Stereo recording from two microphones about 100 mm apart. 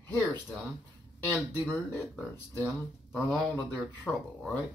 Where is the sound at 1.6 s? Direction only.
15° left (ahead or behind).